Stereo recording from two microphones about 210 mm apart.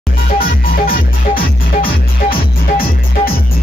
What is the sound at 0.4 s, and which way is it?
Music, 45° left (ahead or behind).